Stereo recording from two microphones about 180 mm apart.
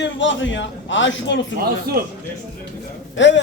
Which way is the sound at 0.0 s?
90° left.